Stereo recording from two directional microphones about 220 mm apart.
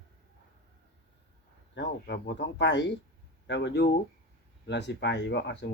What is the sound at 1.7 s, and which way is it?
Speech, 55° left (ahead or behind).